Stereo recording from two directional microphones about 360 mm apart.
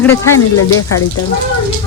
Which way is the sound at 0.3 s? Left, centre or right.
Left.